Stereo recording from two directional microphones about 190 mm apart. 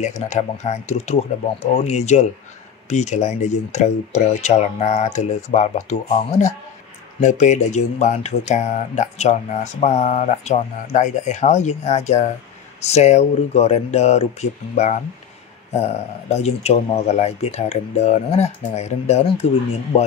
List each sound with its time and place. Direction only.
0.0 s speech: 40° left (ahead or behind)